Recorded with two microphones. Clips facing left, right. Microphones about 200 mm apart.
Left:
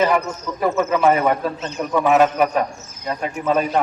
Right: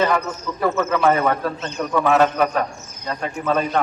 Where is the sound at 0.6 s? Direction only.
15° left (ahead or behind).